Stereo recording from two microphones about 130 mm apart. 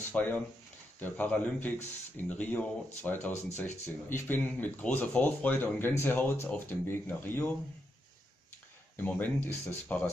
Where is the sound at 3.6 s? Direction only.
60° left (ahead or behind).